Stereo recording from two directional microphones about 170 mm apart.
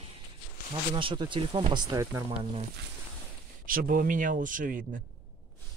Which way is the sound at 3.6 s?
55° right (ahead or behind).